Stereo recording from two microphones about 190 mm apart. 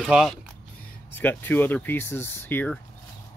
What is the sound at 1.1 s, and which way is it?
Speech, 10° left (ahead or behind).